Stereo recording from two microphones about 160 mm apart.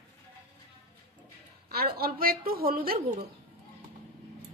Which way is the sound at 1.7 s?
70° right (ahead or behind).